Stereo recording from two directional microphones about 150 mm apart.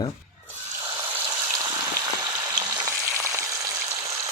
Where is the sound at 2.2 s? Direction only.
25° right (ahead or behind).